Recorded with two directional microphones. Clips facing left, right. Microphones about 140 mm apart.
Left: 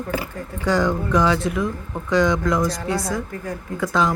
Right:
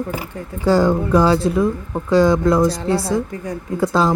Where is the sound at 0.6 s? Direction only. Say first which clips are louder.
Right 5 dB; 30° right (ahead or behind).